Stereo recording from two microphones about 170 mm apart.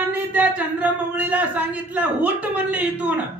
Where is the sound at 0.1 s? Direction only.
10° right (ahead or behind).